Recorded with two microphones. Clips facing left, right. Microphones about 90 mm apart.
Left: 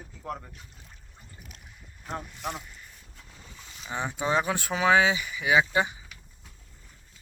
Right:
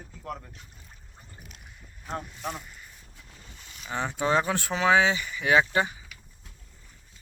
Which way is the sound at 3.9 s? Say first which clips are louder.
Right 2 dB; 15° left (ahead or behind).